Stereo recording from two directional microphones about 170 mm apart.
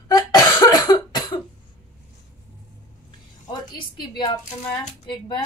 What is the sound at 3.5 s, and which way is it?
Speech, 25° left (ahead or behind).